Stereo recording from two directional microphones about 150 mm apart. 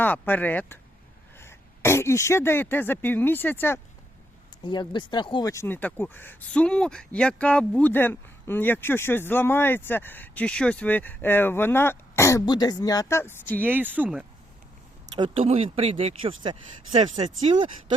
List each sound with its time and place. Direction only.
0.0 s speech: 10° left (ahead or behind)
4.6 s speech: 30° left (ahead or behind)
5.5 s speech: 15° left (ahead or behind)
13.7 s speech: 10° right (ahead or behind)
15.4 s speech: 40° right (ahead or behind)